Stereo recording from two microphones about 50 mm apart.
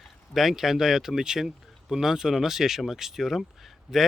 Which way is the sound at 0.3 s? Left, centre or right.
Centre.